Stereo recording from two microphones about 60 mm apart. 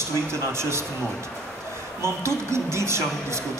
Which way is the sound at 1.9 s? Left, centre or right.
Right.